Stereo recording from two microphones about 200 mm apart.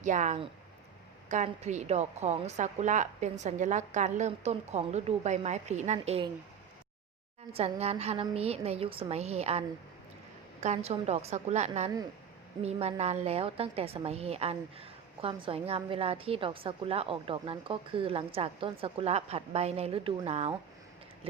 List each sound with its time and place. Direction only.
0.0 s a woman's voice: 35° right (ahead or behind)
7.5 s a woman's voice: 30° right (ahead or behind)